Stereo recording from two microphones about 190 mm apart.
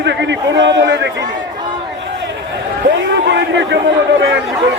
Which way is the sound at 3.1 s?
65° right (ahead or behind).